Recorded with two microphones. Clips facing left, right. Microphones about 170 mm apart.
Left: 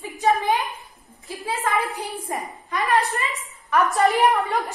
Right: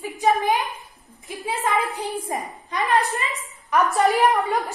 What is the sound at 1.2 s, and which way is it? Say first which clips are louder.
A woman's voice: right 1 dB; 20° right (ahead or behind).